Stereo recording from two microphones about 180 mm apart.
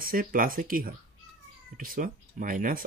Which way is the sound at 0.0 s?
50° right (ahead or behind).